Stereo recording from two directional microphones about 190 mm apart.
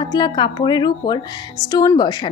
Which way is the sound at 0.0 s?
25° left (ahead or behind).